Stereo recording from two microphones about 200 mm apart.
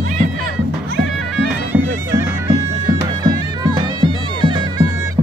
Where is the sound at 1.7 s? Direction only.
10° right (ahead or behind).